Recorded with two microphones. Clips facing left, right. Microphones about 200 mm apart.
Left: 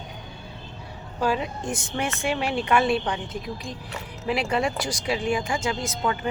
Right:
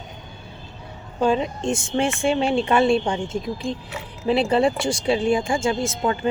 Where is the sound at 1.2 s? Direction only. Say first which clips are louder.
Right 5 dB; 25° right (ahead or behind).